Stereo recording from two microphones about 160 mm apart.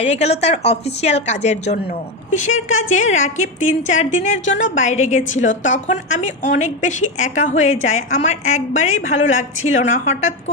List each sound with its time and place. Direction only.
0.0 s a woman's voice: 40° left (ahead or behind)